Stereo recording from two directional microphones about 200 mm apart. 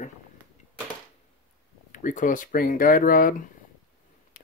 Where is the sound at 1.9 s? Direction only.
40° left (ahead or behind).